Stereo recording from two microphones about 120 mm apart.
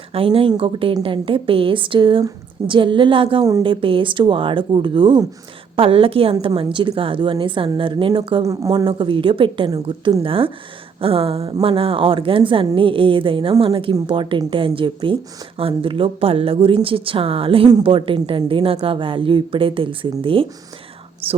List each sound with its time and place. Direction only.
0.1 s a woman's voice: 50° right (ahead or behind)